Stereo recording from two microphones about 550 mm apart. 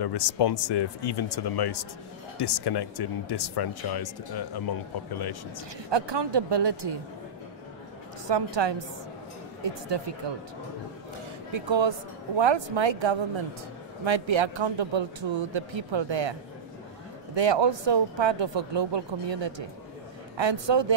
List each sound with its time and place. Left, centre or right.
0.0 s speech: left
5.9 s speech: right
8.3 s speech: right
11.5 s speech: right
17.4 s speech: right